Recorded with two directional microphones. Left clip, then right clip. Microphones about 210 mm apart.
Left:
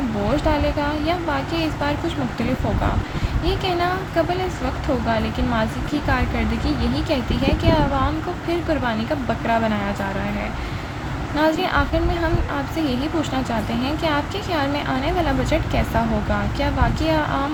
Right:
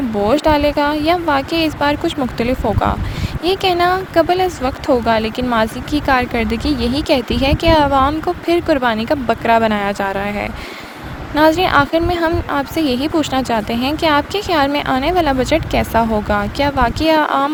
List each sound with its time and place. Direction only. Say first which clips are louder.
0.3 s speech: right 8 dB; 50° right (ahead or behind)